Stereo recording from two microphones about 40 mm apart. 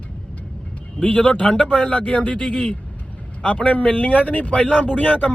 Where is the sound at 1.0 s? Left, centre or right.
Left.